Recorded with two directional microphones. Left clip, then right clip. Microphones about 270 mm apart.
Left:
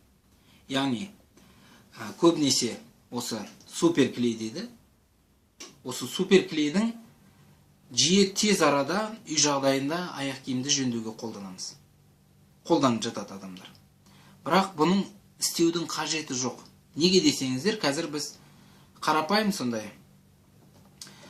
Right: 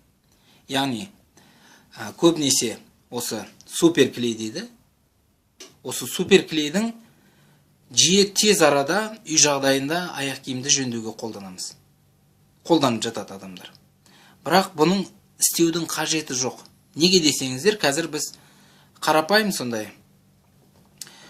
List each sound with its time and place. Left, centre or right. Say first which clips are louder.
0.7 s speech: right 4 dB; right
5.8 s speech: right 4 dB; right
7.9 s speech: right 5 dB; right
12.6 s speech: right 4 dB; right